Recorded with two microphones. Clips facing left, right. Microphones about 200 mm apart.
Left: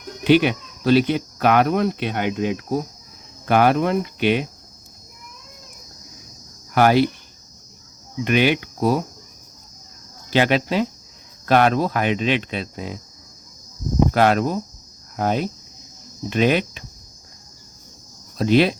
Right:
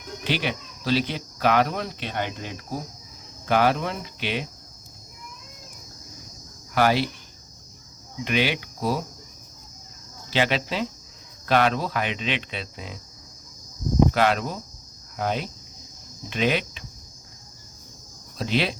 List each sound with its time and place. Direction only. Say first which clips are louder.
0.3 s speech: left 12 dB; 55° left (ahead or behind)
3.4 s speech: left 5 dB; 55° left (ahead or behind)
6.7 s speech: left 5 dB; 50° left (ahead or behind)
8.2 s speech: left 6 dB; 55° left (ahead or behind)
10.2 s speech: left 6 dB; 50° left (ahead or behind)
14.1 s speech: left 5 dB; 50° left (ahead or behind)
18.3 s speech: left 9 dB; 50° left (ahead or behind)